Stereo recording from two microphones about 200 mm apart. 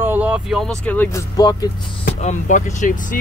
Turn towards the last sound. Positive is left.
turn(degrees=40)  # may be behind; listen again after turning